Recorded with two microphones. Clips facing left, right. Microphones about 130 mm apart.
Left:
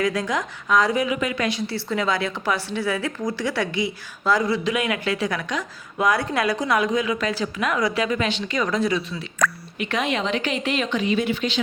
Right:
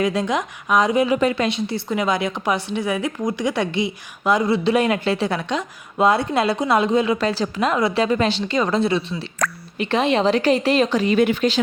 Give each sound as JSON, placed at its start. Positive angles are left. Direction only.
{"t": 0.0, "sound": "a woman's voice", "side_deg": -25}
{"t": 1.1, "sound": "a woman's voice", "side_deg": -35}
{"t": 1.4, "sound": "a woman's voice", "side_deg": -25}